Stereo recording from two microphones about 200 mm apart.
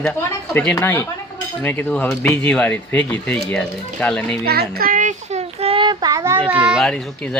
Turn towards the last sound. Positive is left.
turn(degrees=5)  # may be behind; listen again after turning